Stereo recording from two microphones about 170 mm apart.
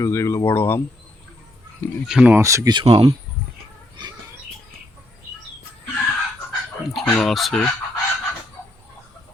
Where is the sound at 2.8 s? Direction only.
30° right (ahead or behind).